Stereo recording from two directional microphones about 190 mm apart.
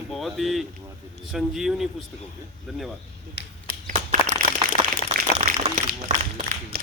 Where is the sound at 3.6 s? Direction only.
45° right (ahead or behind).